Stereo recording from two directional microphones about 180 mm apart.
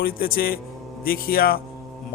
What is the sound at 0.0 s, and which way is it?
Speech, 55° left (ahead or behind).